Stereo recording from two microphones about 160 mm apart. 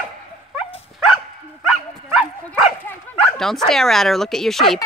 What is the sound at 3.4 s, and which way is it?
Speech, centre (ahead or behind).